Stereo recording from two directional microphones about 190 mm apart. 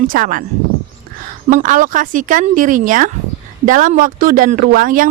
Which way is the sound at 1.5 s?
45° right (ahead or behind).